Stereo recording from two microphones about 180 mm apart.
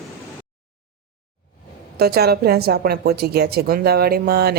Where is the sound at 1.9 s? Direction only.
60° right (ahead or behind).